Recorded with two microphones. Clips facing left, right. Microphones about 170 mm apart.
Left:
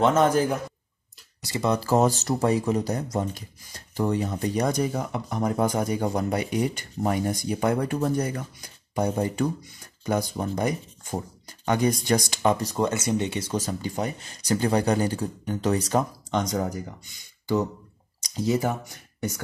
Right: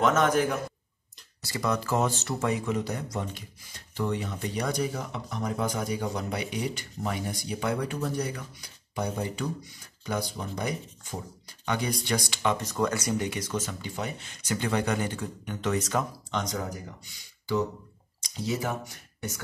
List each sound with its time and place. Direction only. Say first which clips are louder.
0.0 s speech: left 3 dB; 30° left (ahead or behind)
18.2 s speech: left 6 dB; 40° left (ahead or behind)